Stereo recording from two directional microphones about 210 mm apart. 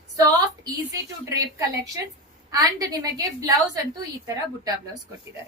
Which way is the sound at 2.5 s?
15° right (ahead or behind).